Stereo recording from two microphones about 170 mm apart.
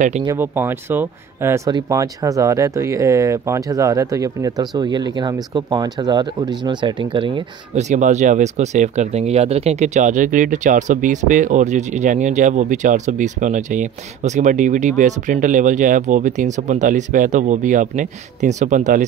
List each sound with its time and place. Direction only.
0.2 s speech: 15° right (ahead or behind)
7.9 s speech: 45° right (ahead or behind)